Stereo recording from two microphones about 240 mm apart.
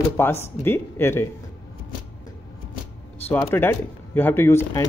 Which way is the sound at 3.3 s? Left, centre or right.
Centre.